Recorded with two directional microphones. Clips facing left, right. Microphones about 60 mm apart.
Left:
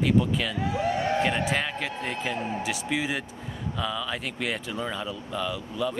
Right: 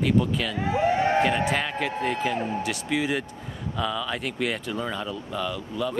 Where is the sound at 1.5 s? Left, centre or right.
Centre.